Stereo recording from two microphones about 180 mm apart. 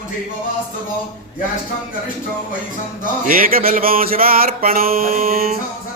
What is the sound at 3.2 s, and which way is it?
Mantra, 50° right (ahead or behind).